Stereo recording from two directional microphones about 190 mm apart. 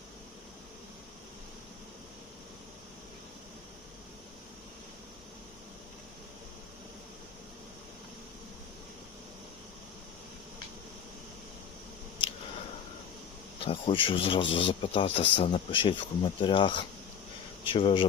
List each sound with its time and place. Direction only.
13.6 s speech: 30° left (ahead or behind)